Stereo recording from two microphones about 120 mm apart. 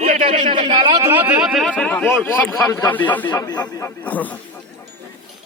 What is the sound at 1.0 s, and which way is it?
Speech, 20° right (ahead or behind).